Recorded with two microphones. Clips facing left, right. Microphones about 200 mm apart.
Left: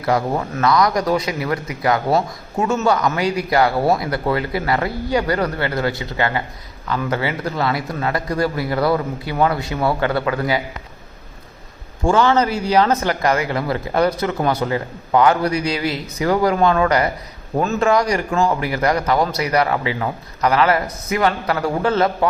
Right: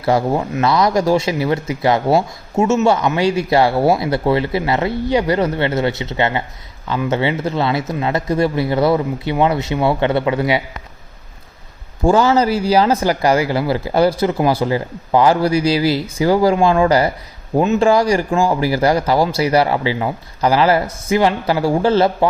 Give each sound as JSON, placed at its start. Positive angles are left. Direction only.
{"t": 0.0, "sound": "speech", "side_deg": -30}
{"t": 12.0, "sound": "a man's voice", "side_deg": -35}